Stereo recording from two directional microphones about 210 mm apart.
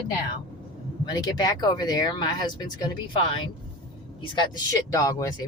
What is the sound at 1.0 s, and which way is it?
Speech, 20° left (ahead or behind).